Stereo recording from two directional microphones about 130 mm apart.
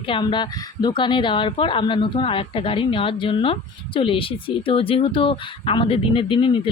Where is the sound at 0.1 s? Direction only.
35° left (ahead or behind).